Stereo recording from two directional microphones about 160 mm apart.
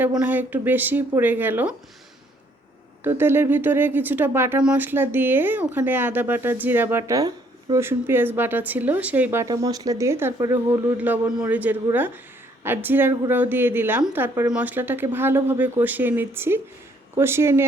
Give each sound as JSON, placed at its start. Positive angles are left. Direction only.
{"t": 0.2, "sound": "speech", "side_deg": -10}
{"t": 3.0, "sound": "speech", "side_deg": -15}